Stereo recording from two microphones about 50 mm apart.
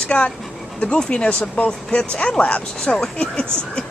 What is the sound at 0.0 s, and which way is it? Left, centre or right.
Speech, left.